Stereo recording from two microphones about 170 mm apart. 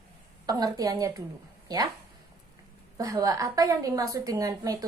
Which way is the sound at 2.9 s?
20° right (ahead or behind).